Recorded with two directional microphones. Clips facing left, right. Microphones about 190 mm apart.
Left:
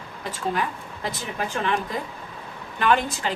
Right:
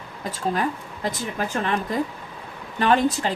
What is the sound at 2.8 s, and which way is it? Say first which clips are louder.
Speech: right 3 dB; 35° right (ahead or behind).